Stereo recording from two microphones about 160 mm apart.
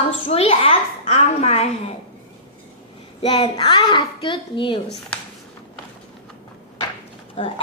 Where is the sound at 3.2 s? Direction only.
35° left (ahead or behind).